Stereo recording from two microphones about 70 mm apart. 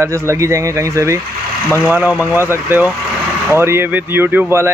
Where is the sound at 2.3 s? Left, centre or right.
Right.